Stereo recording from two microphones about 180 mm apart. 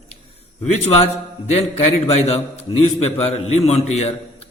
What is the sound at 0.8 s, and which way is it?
A man's voice, 35° left (ahead or behind).